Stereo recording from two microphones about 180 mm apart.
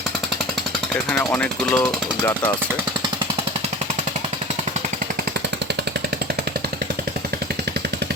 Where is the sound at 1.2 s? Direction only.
5° left (ahead or behind).